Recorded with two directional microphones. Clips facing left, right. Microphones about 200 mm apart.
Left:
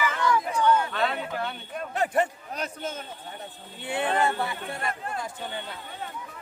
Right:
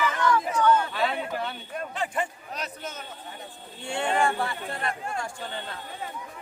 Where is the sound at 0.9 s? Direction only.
Centre (ahead or behind).